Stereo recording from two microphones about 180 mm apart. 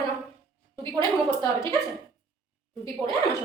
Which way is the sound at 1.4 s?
15° left (ahead or behind).